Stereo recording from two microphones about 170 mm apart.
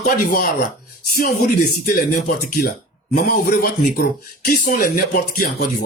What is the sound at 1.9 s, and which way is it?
Speech, 50° left (ahead or behind).